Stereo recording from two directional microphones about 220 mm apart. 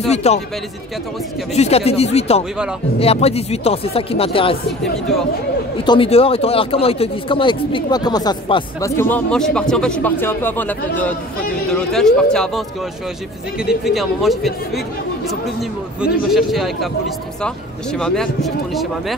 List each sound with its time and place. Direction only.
0.1 s speech: 30° left (ahead or behind)
1.5 s speech: 30° left (ahead or behind)
5.9 s speech: 25° left (ahead or behind)
8.9 s speech: 10° left (ahead or behind)
13.7 s speech: centre (ahead or behind)
16.0 s speech: centre (ahead or behind)
17.9 s speech: 5° left (ahead or behind)